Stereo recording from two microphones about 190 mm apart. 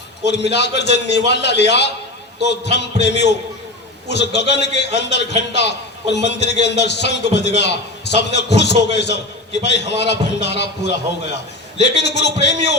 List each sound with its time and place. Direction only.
0.3 s a man's voice: 65° left (ahead or behind)